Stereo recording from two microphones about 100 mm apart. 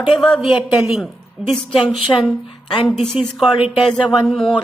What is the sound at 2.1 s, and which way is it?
Speech, 30° left (ahead or behind).